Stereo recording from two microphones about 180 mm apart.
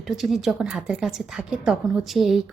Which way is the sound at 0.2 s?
Centre (ahead or behind).